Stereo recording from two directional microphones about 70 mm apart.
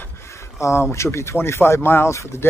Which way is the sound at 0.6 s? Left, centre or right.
Left.